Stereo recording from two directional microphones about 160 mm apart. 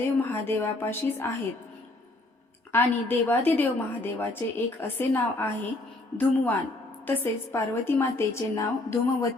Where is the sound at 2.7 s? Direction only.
15° left (ahead or behind).